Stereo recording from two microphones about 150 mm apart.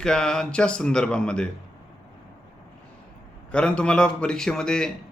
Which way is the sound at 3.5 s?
5° left (ahead or behind).